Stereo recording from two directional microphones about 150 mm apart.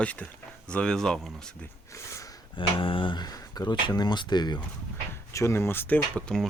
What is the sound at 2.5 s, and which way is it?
Speech, 35° left (ahead or behind).